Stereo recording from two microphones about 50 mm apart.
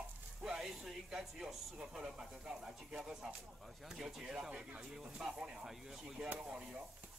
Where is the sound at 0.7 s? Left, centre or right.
Centre.